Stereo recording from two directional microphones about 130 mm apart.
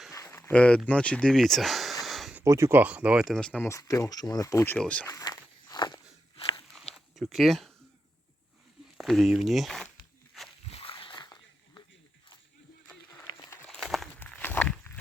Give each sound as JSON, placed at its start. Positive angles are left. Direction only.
{"t": 0.1, "sound": "a sound", "side_deg": 20}
{"t": 0.5, "sound": "speech", "side_deg": 10}
{"t": 2.4, "sound": "speech", "side_deg": -20}
{"t": 3.2, "sound": "speech", "side_deg": 5}
{"t": 3.6, "sound": "speech", "side_deg": 25}
{"t": 5.0, "sound": "walk", "side_deg": 25}
{"t": 6.9, "sound": "a sound", "side_deg": 0}
{"t": 9.0, "sound": "speech", "side_deg": 0}
{"t": 10.7, "sound": "splash", "side_deg": 45}
{"t": 13.3, "sound": "a sound", "side_deg": 20}
{"t": 13.7, "sound": "a sound", "side_deg": 0}
{"t": 14.2, "sound": "walk", "side_deg": 15}